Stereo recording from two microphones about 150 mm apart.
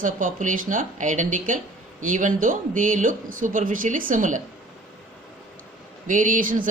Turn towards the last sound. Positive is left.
turn(degrees=-65)  # may be behind; listen again after turning